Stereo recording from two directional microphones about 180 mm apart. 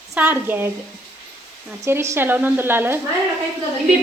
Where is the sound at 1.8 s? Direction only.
15° right (ahead or behind).